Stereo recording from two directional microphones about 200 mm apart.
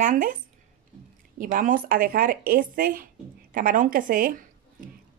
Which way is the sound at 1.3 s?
45° right (ahead or behind).